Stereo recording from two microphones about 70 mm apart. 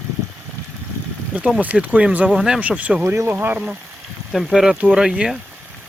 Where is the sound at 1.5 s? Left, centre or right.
Centre.